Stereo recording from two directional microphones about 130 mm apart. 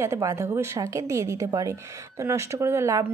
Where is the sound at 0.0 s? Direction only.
20° right (ahead or behind).